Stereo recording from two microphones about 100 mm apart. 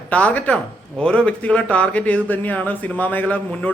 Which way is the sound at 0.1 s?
15° left (ahead or behind).